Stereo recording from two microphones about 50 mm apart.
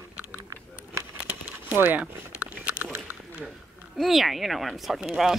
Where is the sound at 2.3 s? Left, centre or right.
Right.